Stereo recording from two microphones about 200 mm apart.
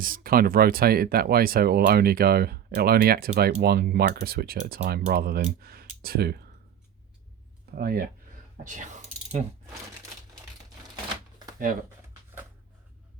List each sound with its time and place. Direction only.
0.0 s speech: 45° right (ahead or behind)
7.8 s speech: 50° right (ahead or behind)
8.6 s ratchet: 40° right (ahead or behind)